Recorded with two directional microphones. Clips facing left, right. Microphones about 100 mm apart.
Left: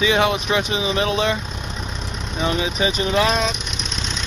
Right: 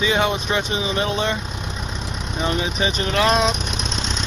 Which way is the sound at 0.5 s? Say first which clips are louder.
Left 1 dB; 30° right (ahead or behind).